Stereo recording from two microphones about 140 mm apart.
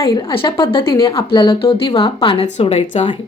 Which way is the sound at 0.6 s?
35° left (ahead or behind).